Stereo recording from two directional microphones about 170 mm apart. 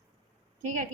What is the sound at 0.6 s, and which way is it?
Speech, 50° right (ahead or behind).